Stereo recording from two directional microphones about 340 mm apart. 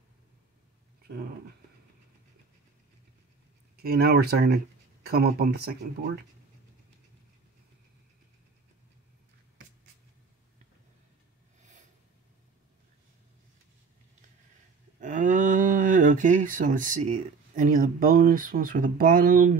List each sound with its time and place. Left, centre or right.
3.7 s speech: right
15.0 s speech: right